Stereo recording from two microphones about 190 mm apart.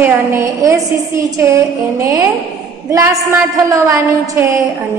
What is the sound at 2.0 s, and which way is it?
A woman's voice, 15° right (ahead or behind).